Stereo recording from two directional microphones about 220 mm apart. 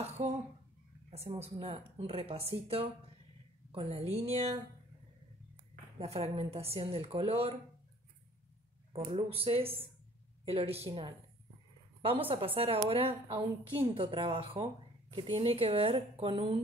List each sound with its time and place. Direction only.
0.0 s a sound: 30° right (ahead or behind)
1.1 s a woman's voice: 30° right (ahead or behind)
4.1 s a woman's voice: 30° right (ahead or behind)
5.9 s a woman's voice: 25° right (ahead or behind)
8.9 s a woman's voice: 20° right (ahead or behind)